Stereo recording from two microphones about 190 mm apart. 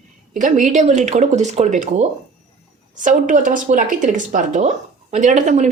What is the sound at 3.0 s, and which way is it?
Speech, 40° right (ahead or behind).